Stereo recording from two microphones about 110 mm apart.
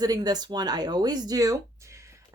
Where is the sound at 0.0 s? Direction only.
35° right (ahead or behind).